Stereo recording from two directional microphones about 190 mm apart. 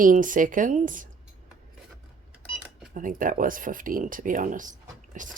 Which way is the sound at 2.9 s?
45° right (ahead or behind).